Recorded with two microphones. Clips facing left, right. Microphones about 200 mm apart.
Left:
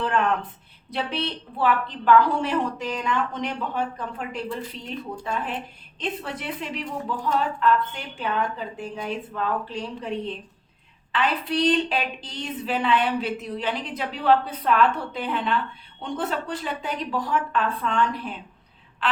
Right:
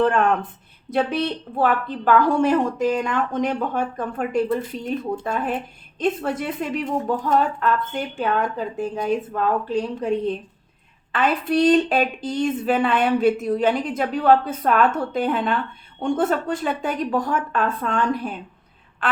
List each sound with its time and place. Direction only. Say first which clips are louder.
0.0 s a woman's voice: right 5 dB; 45° right (ahead or behind)